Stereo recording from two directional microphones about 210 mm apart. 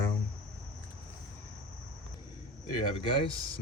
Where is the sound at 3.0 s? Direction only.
25° left (ahead or behind).